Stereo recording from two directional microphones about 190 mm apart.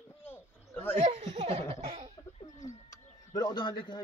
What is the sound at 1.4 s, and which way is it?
Laughter, 30° right (ahead or behind).